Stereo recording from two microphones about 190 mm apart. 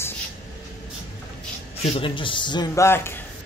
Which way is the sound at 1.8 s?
30° left (ahead or behind).